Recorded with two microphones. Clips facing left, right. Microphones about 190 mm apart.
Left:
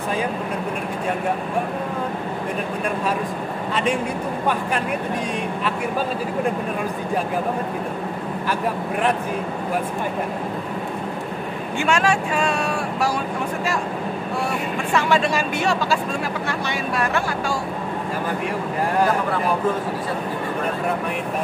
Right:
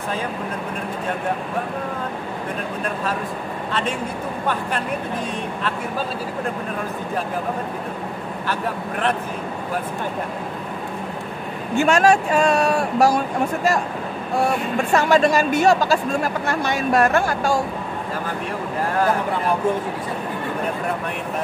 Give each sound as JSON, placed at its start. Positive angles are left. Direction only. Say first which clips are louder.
{"t": 11.7, "sound": "speech", "louder": "right 5 dB", "side_deg": -40}
{"t": 14.9, "sound": "speech", "louder": "right 4 dB", "side_deg": -40}